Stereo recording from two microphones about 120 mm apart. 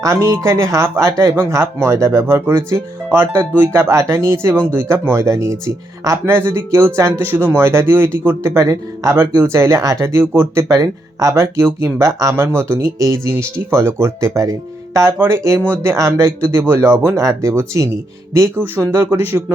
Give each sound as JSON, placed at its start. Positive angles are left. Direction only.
{"t": 0.0, "sound": "speech", "side_deg": -25}